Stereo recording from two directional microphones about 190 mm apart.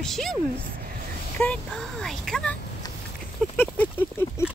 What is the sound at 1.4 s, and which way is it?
Speech, 5° left (ahead or behind).